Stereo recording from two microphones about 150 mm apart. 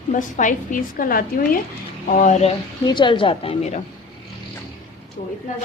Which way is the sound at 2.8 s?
30° left (ahead or behind).